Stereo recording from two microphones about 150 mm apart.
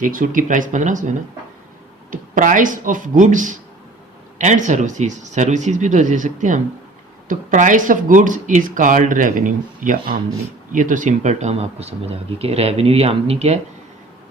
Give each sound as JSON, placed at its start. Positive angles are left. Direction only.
{"t": 0.0, "sound": "speech", "side_deg": -65}